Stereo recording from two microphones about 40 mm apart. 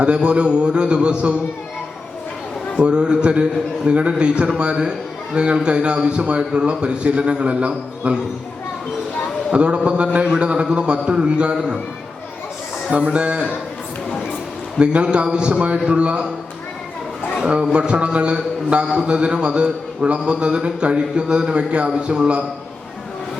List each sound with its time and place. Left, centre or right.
0.0 s a man's voice: right
2.7 s a man's voice: right
9.5 s a man's voice: right
13.1 s a man's voice: right
14.8 s a man's voice: right
17.4 s a man's voice: right